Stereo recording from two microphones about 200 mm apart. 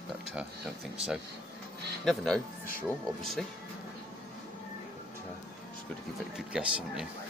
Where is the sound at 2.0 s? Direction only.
Centre (ahead or behind).